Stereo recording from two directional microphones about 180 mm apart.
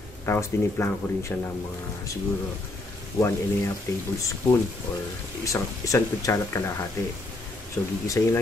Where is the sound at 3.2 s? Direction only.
15° left (ahead or behind).